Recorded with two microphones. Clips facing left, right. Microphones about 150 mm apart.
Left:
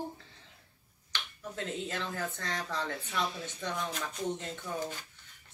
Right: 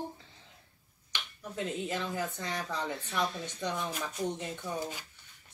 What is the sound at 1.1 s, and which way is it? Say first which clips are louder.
Speech: right 1 dB; 15° right (ahead or behind).